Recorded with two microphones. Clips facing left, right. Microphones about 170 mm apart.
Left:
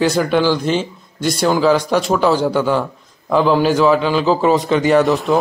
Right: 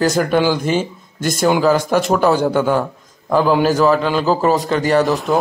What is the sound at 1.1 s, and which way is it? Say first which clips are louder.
Speech: left 1 dB; 50° right (ahead or behind).